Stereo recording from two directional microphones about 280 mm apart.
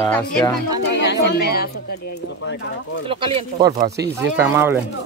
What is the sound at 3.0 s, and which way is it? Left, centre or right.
Speech, centre.